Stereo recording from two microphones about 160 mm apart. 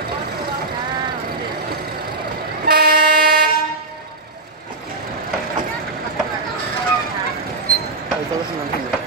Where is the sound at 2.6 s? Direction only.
70° right (ahead or behind).